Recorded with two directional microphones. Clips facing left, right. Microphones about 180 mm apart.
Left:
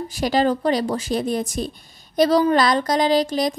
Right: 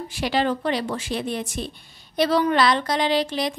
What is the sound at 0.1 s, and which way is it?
A woman's voice, 40° left (ahead or behind).